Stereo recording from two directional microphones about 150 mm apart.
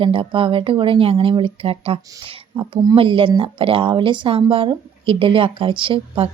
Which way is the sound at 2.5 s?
25° right (ahead or behind).